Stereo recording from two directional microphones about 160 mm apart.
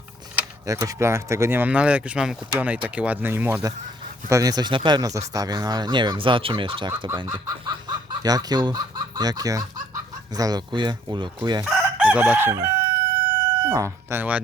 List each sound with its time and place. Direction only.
0.6 s speech: 20° right (ahead or behind)
11.6 s chicken: 5° right (ahead or behind)
13.7 s speech: 15° right (ahead or behind)